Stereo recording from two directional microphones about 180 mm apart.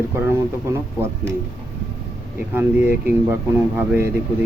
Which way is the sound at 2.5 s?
10° right (ahead or behind).